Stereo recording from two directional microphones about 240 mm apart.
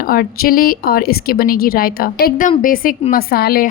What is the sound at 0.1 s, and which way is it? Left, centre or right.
A woman's voice, left.